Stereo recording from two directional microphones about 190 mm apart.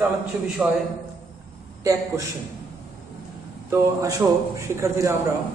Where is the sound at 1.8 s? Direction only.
15° right (ahead or behind).